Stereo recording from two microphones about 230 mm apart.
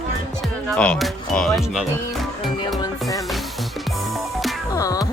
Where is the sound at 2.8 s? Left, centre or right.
Centre.